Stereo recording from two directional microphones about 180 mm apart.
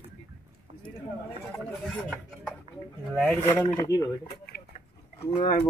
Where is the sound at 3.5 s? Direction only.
10° left (ahead or behind).